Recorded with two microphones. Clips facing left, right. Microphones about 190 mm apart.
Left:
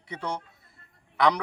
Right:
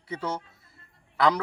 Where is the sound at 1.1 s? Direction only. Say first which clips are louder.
Even; 5° right (ahead or behind).